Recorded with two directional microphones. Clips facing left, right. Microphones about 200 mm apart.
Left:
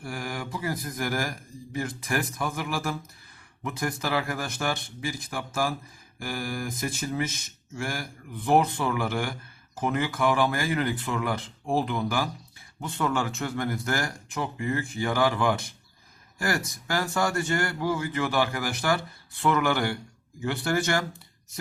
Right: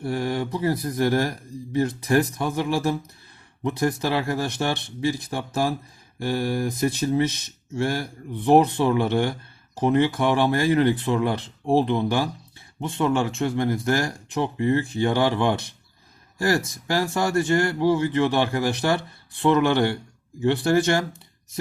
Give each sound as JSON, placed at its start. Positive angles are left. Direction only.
{"t": 0.0, "sound": "speech", "side_deg": -30}
{"t": 3.6, "sound": "mantra", "side_deg": -30}
{"t": 5.3, "sound": "speech", "side_deg": -25}
{"t": 6.1, "sound": "mantra", "side_deg": -30}
{"t": 7.8, "sound": "speech", "side_deg": -30}